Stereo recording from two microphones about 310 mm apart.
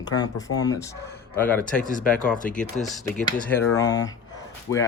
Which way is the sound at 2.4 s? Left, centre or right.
Left.